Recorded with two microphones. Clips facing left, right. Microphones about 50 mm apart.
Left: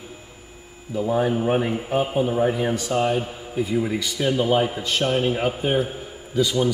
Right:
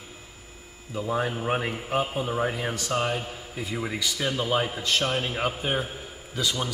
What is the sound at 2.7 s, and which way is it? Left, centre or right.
A man's voice, centre.